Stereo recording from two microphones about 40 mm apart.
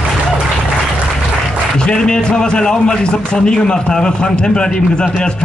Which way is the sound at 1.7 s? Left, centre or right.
Left.